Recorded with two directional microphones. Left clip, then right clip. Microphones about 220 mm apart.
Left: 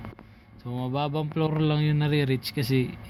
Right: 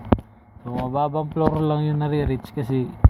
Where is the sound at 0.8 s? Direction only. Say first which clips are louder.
Right 6 dB; 15° left (ahead or behind).